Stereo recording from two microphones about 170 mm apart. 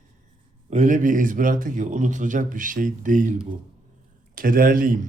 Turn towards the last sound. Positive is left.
turn(degrees=-55)  # may be behind; listen again after turning